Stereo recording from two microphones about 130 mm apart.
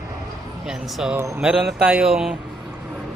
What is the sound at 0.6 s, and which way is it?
A man's voice, 5° right (ahead or behind).